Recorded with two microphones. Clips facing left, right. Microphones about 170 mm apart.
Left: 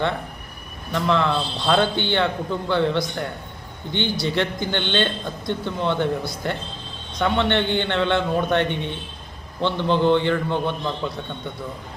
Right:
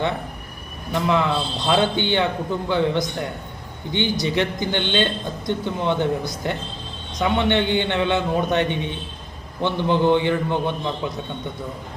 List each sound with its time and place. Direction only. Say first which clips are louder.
0.9 s a man's voice: even; 15° right (ahead or behind)